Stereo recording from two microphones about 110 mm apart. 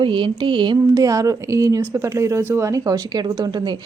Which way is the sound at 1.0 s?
30° right (ahead or behind).